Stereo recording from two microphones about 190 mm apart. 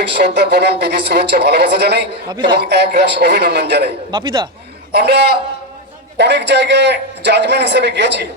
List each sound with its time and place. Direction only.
0.2 s a man's voice: 60° right (ahead or behind)
2.3 s speech: 25° right (ahead or behind)
2.6 s a man's voice: 60° right (ahead or behind)
4.1 s speech: 25° right (ahead or behind)
4.9 s a man's voice: 60° right (ahead or behind)